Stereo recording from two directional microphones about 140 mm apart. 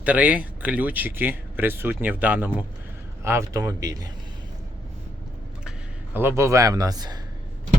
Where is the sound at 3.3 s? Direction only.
20° right (ahead or behind).